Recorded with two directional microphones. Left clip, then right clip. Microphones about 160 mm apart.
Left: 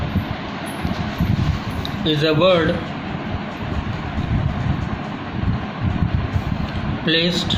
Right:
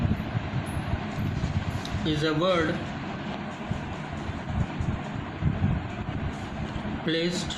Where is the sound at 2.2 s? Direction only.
25° left (ahead or behind).